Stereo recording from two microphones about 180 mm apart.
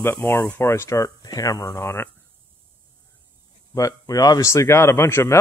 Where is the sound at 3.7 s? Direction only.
20° left (ahead or behind).